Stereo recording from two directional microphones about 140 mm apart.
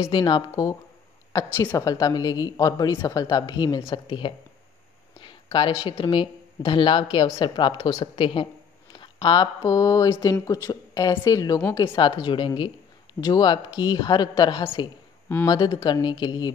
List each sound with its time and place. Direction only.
0.0 s a woman's voice: 30° left (ahead or behind)